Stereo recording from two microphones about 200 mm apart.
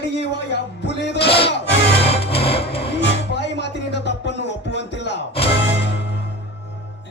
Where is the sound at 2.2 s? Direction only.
30° left (ahead or behind).